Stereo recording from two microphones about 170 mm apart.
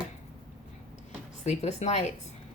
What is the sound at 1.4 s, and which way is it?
Speech, 40° left (ahead or behind).